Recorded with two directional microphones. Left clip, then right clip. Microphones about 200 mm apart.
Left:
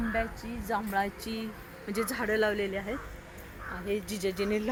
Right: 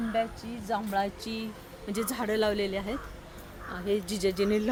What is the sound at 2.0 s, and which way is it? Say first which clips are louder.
Speech: even; 85° right.